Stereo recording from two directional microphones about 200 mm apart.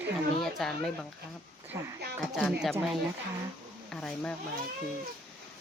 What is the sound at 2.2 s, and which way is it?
Speech, centre (ahead or behind).